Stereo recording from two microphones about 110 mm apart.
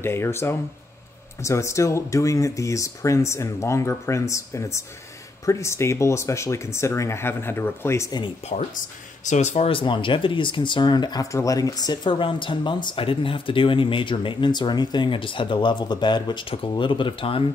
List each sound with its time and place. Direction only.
0.0 s speech: 20° left (ahead or behind)
8.5 s speech: 80° left
9.2 s speech: 90° left
9.7 s speech: 50° left (ahead or behind)